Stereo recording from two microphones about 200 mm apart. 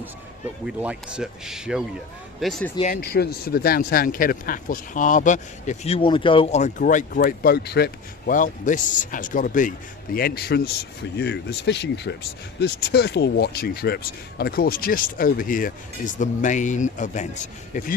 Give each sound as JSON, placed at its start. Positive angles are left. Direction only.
{"t": 0.6, "sound": "speech", "side_deg": -5}
{"t": 2.7, "sound": "a man's voice", "side_deg": 35}
{"t": 3.1, "sound": "speech", "side_deg": 50}
{"t": 8.3, "sound": "a man's voice", "side_deg": 40}